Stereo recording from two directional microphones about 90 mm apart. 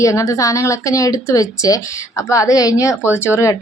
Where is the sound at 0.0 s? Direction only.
35° left (ahead or behind).